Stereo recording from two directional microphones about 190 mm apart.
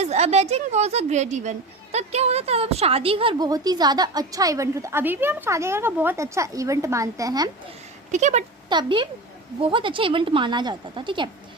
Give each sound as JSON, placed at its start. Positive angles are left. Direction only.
{"t": 0.0, "sound": "a woman's voice", "side_deg": -35}
{"t": 8.1, "sound": "speech", "side_deg": -40}
{"t": 8.7, "sound": "a woman's voice", "side_deg": -25}